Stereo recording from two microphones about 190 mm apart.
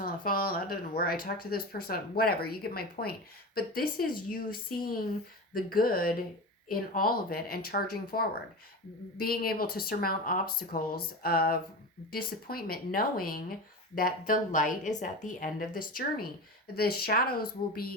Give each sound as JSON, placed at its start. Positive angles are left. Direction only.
{"t": 0.0, "sound": "speech", "side_deg": 50}